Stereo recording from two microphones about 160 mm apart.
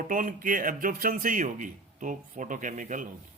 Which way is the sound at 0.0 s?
55° right (ahead or behind).